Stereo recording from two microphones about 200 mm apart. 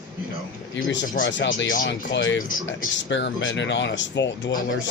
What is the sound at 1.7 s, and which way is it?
Speech, 40° left (ahead or behind).